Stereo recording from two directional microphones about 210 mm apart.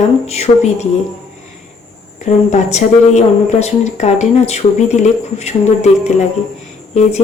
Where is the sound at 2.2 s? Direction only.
30° left (ahead or behind).